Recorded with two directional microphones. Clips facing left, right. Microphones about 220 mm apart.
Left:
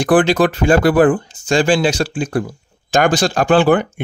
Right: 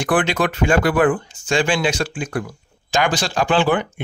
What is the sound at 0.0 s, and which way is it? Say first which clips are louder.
Speech: left 6 dB; 35° left (ahead or behind).